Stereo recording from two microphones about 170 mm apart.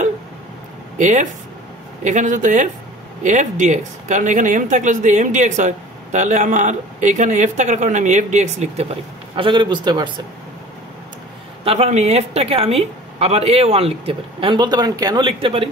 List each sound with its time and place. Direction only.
0.9 s speech: 45° right (ahead or behind)
9.3 s a man's voice: 30° right (ahead or behind)
11.6 s a woman's voice: 35° right (ahead or behind)